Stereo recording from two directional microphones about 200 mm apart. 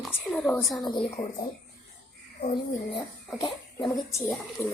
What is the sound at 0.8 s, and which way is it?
Speech, 25° left (ahead or behind).